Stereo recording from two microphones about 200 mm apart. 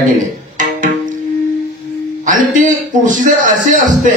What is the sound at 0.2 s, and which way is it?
Music, 40° right (ahead or behind).